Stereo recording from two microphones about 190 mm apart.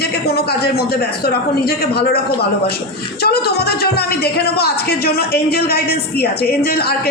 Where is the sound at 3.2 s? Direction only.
55° left (ahead or behind).